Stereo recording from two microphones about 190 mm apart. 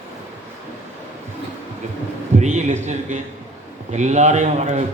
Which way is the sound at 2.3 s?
35° right (ahead or behind).